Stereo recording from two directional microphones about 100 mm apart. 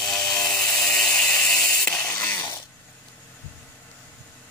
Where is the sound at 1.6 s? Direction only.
25° left (ahead or behind).